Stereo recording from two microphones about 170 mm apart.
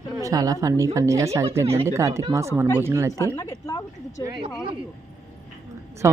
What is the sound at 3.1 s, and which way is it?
A woman's voice, 15° left (ahead or behind).